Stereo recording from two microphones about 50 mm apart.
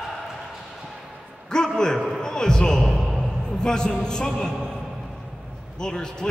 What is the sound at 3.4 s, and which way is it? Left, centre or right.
Speech, centre.